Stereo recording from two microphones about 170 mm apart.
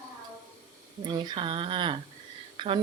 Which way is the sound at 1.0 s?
25° right (ahead or behind).